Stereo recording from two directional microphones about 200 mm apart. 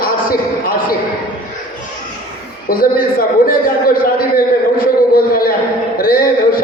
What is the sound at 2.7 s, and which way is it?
A man's voice, 45° left (ahead or behind).